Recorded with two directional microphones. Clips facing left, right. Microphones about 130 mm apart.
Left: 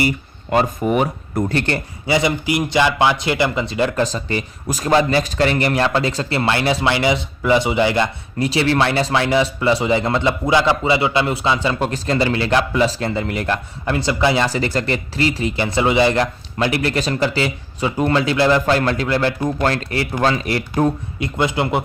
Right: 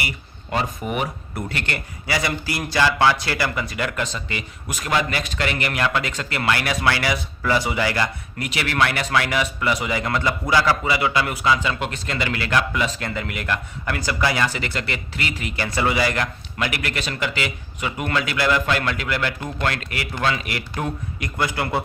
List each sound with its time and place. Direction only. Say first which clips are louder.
0.5 s speech: left 8 dB; 40° left (ahead or behind); by 14.5 s 25° left (ahead or behind)
14.5 s speech: left 8 dB; 35° left (ahead or behind)
21.3 s speech: left 5 dB; 20° left (ahead or behind)